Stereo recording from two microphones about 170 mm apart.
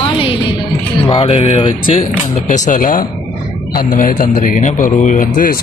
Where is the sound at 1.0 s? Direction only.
35° left (ahead or behind).